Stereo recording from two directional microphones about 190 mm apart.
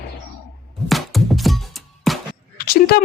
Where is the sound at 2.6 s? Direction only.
55° left (ahead or behind).